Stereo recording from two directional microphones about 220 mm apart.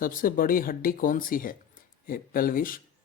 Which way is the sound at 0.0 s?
40° left (ahead or behind).